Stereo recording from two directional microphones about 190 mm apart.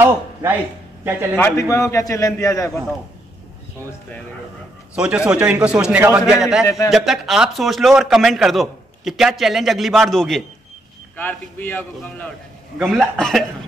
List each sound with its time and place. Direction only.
0.0 s a man's voice: 15° right (ahead or behind)
1.3 s a man's voice: 15° left (ahead or behind)
4.9 s a man's voice: 5° right (ahead or behind)